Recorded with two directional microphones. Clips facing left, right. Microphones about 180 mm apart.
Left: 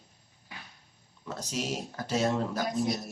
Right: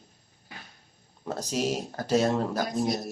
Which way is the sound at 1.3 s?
35° right (ahead or behind).